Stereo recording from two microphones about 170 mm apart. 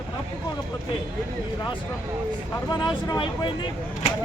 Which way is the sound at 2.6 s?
25° left (ahead or behind).